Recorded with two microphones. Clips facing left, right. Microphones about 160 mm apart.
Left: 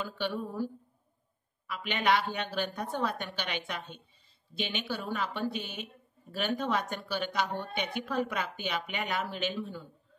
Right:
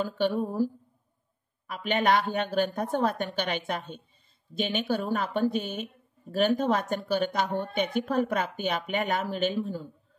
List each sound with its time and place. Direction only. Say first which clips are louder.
0.0 s a woman's voice: right 7 dB; 45° right (ahead or behind)
1.7 s a woman's voice: right 4 dB; 45° right (ahead or behind)